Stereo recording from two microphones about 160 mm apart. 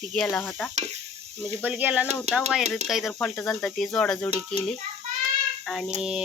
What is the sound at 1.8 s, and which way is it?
Speech, 10° right (ahead or behind).